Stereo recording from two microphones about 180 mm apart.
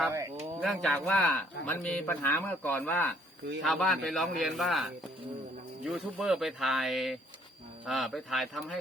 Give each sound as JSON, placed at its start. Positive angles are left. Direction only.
{"t": 0.1, "sound": "speech", "side_deg": -20}
{"t": 0.6, "sound": "speech", "side_deg": 0}